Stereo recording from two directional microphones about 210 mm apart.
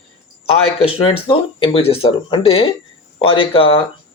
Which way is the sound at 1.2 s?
25° left (ahead or behind).